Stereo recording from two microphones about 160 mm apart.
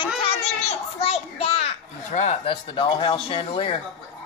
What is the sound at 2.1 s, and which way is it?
Speech, 45° left (ahead or behind).